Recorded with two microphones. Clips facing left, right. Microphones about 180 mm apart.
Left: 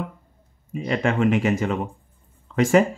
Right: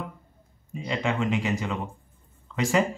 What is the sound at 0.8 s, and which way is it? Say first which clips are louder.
Speech: left 6 dB; 55° left (ahead or behind).